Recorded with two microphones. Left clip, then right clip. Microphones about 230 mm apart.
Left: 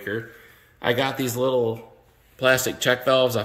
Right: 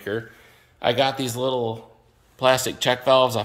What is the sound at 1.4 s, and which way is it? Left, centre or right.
Speech, centre.